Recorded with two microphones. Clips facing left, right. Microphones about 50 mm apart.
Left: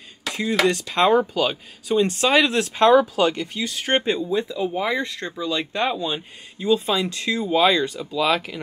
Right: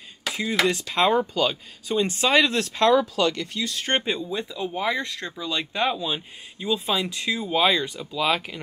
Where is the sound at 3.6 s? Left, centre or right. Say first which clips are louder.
Left 4 dB; centre.